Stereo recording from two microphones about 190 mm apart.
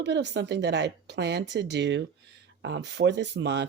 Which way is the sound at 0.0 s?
65° right (ahead or behind).